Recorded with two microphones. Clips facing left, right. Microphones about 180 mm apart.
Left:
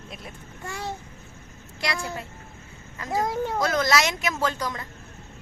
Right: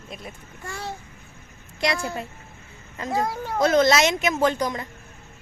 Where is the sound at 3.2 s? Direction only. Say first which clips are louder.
Left 2 dB; 20° left (ahead or behind).